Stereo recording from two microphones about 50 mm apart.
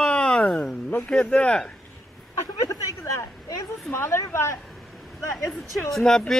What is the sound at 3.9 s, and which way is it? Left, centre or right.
Speech, left.